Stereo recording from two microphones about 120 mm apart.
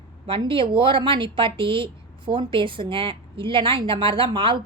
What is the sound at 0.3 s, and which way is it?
A woman's voice, 45° right (ahead or behind).